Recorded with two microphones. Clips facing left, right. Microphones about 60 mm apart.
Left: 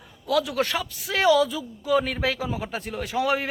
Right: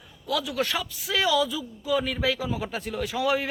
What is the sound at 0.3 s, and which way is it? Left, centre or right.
A man's voice, left.